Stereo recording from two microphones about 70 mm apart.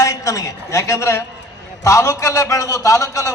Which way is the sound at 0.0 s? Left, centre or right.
Left.